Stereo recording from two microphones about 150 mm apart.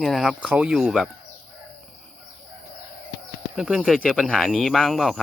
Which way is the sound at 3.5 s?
5° right (ahead or behind).